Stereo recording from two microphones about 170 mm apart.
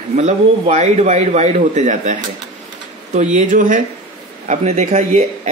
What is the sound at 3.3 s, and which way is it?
Speech, 50° right (ahead or behind).